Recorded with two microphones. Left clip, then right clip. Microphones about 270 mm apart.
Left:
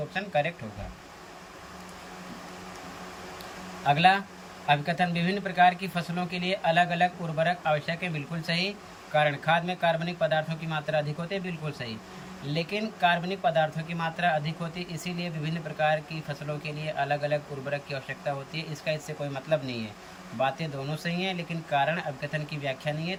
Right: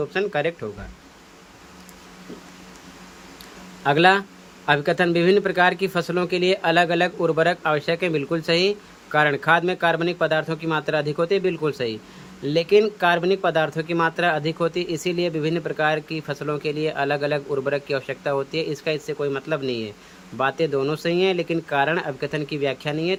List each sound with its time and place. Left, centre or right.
0.1 s speech: centre
3.8 s speech: centre